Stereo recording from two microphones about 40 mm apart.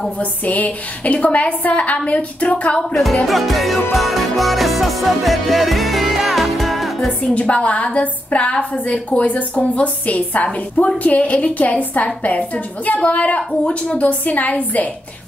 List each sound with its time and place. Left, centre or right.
0.2 s a woman's voice: left
2.9 s music: centre
7.1 s a woman's voice: left
14.2 s a woman's voice: left